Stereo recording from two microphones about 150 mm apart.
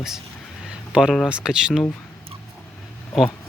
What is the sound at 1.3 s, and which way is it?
Speech, 5° right (ahead or behind).